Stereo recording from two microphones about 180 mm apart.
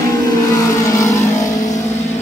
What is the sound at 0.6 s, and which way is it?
Vehicle, 20° left (ahead or behind).